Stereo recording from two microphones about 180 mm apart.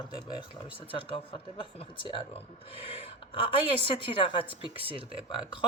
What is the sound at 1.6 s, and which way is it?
Speech, 30° left (ahead or behind).